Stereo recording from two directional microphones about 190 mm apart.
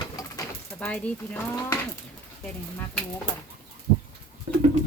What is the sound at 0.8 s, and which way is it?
Speech, 5° left (ahead or behind).